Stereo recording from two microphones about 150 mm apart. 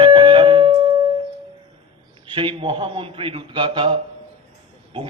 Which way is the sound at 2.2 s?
35° right (ahead or behind).